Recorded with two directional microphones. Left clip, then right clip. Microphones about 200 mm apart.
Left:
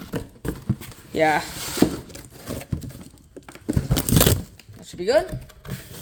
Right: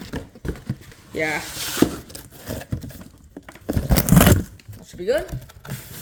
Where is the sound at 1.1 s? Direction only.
20° left (ahead or behind).